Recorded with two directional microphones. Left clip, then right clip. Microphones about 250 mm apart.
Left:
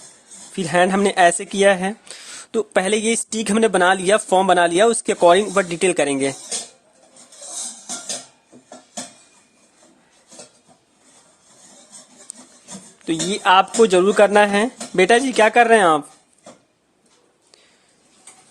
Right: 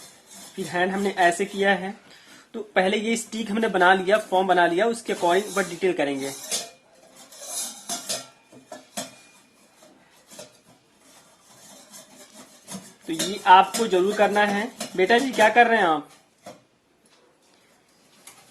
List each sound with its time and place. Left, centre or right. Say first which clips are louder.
0.7 s speech: left 8 dB; left
13.1 s speech: even; left